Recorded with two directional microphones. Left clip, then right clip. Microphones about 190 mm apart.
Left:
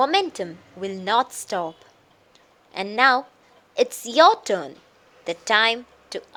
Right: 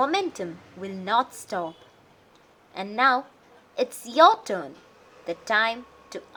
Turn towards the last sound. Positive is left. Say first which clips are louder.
# left 6 dB
turn(degrees=40)  # may be behind; listen again after turning